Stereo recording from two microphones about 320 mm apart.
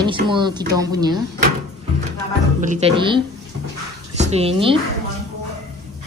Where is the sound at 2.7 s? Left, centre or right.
Centre.